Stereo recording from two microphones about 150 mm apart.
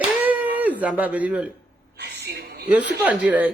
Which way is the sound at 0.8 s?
10° right (ahead or behind).